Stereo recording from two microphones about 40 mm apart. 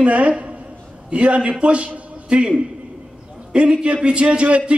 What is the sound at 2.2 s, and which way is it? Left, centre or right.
A man's voice, right.